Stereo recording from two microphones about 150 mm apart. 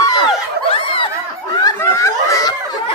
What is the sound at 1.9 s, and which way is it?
Snicker, 20° left (ahead or behind).